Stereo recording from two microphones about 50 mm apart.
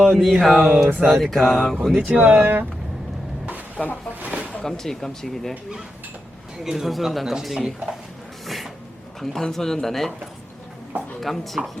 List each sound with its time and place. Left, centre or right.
0.0 s speech: centre
2.0 s speech: right
3.8 s speech: left
4.2 s a sound: right
4.6 s speech: centre
6.7 s speech: centre
8.4 s a sound: centre
9.2 s speech: centre
11.2 s speech: centre